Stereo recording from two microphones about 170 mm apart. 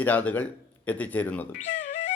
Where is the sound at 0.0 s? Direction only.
10° left (ahead or behind).